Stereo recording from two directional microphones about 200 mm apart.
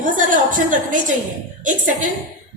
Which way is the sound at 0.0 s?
40° right (ahead or behind).